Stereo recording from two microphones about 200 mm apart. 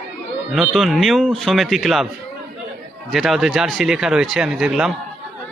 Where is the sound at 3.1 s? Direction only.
Centre (ahead or behind).